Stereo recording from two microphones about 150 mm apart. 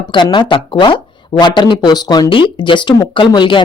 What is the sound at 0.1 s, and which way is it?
Speech, 30° left (ahead or behind).